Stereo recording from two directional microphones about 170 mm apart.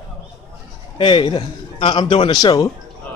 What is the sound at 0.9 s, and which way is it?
A man's voice, 30° left (ahead or behind).